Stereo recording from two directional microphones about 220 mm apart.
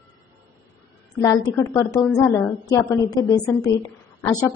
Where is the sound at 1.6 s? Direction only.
15° left (ahead or behind).